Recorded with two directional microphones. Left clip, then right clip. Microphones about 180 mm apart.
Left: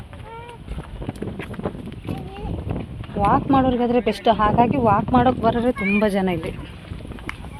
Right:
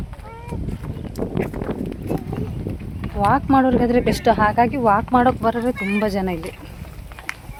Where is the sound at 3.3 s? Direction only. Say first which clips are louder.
Right 2 dB; 30° right (ahead or behind); by 6.5 s 10° right (ahead or behind).